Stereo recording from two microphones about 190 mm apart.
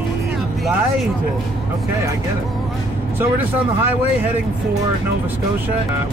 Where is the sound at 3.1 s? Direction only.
10° right (ahead or behind).